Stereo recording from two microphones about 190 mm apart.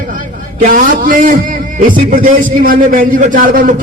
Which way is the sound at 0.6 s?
45° right (ahead or behind).